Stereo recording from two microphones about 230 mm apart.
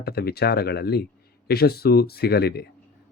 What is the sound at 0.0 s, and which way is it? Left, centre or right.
Speech, left.